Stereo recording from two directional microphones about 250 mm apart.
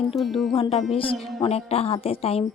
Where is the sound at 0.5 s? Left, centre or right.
Left.